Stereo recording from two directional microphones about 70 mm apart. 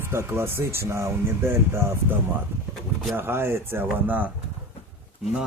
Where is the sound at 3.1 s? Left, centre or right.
Right.